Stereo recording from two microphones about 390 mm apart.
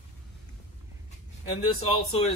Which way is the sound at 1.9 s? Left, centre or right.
Centre.